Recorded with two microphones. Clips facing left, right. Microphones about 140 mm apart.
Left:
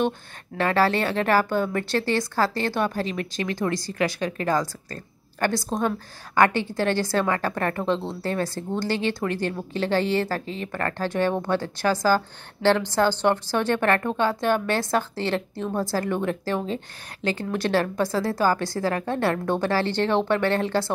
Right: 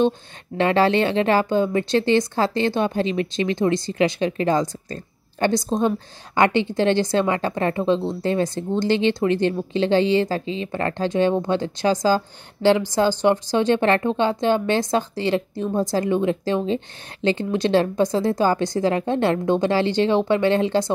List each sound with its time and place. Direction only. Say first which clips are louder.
0.6 s speech: right 4 dB; 20° right (ahead or behind)